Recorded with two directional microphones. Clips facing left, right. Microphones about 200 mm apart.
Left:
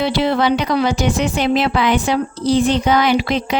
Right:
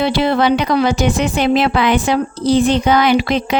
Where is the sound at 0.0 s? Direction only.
55° right (ahead or behind).